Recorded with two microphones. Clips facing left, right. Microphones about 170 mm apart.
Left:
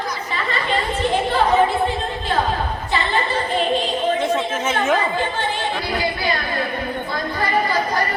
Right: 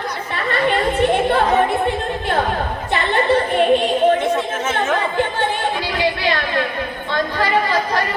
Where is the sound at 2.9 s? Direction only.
60° right (ahead or behind).